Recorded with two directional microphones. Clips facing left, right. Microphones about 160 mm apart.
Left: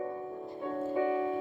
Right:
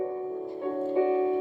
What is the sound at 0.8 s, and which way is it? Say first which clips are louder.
Music: right 6 dB; 20° right (ahead or behind).